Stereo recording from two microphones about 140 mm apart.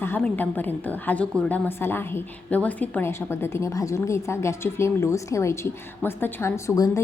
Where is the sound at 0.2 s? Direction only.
10° left (ahead or behind).